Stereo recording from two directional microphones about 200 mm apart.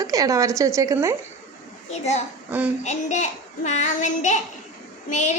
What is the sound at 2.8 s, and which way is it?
Child singing, 35° left (ahead or behind).